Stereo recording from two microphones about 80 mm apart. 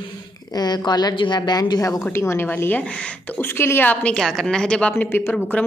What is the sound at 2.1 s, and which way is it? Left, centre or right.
Speech, left.